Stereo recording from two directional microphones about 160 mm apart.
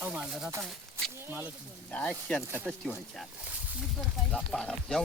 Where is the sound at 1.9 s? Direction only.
10° left (ahead or behind).